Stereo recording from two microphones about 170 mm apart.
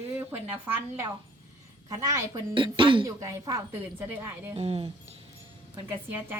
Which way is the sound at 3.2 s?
20° right (ahead or behind).